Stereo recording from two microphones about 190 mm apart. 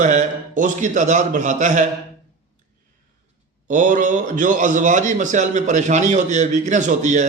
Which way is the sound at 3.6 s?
45° right (ahead or behind).